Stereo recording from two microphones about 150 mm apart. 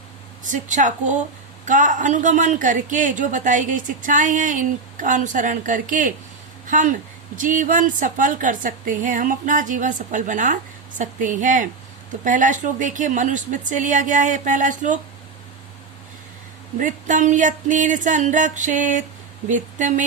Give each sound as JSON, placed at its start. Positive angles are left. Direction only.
{"t": 0.5, "sound": "a woman's voice", "side_deg": -55}
{"t": 16.7, "sound": "a woman's voice", "side_deg": -55}